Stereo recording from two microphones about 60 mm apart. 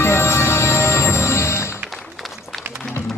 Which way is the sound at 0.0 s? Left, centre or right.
Left.